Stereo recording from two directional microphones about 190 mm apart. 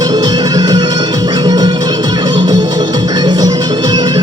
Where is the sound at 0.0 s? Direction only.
20° right (ahead or behind).